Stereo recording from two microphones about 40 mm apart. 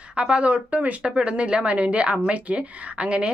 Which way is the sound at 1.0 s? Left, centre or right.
Right.